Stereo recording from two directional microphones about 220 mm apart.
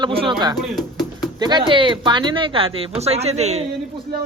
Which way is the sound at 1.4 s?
20° right (ahead or behind).